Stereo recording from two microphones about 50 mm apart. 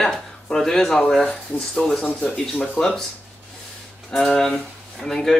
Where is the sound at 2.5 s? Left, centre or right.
Left.